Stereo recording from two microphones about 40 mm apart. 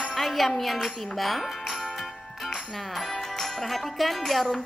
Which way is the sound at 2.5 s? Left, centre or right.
Centre.